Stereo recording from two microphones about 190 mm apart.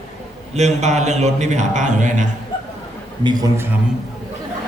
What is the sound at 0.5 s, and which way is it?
Speech, 35° right (ahead or behind).